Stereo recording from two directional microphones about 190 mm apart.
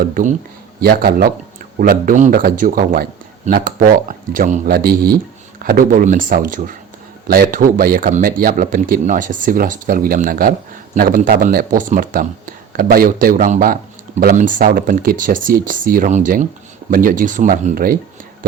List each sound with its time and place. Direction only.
0.0 s a man's voice: 45° right (ahead or behind)